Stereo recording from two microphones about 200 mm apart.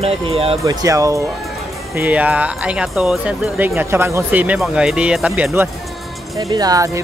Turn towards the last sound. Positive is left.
turn(degrees=-15)  # may be behind; listen again after turning